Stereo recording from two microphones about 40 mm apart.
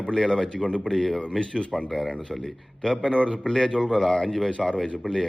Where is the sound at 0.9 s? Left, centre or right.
Centre.